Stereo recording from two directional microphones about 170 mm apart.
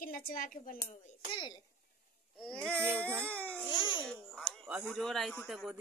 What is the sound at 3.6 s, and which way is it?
Speech, 30° left (ahead or behind).